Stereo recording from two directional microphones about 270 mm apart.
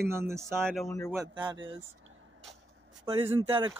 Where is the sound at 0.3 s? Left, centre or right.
Centre.